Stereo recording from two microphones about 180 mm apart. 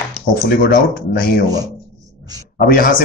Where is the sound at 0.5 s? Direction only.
55° left (ahead or behind).